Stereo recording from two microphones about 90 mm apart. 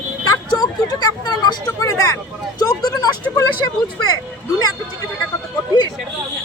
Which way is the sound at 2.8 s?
50° left (ahead or behind).